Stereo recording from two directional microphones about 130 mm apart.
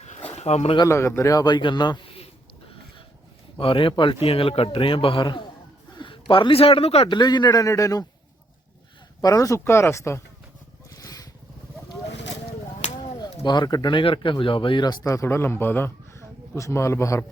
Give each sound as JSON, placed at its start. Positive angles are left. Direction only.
{"t": 0.0, "sound": "a sound", "side_deg": 55}
{"t": 0.9, "sound": "a man's voice", "side_deg": 20}
{"t": 2.1, "sound": "a sound", "side_deg": 50}
{"t": 3.6, "sound": "a man's voice", "side_deg": 45}
{"t": 7.1, "sound": "speech", "side_deg": 35}
{"t": 9.2, "sound": "speech", "side_deg": 25}
{"t": 10.8, "sound": "vehicle", "side_deg": 25}
{"t": 13.4, "sound": "speech", "side_deg": 35}